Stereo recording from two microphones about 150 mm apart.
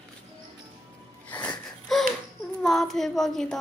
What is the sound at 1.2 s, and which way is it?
Wheeze, 10° left (ahead or behind).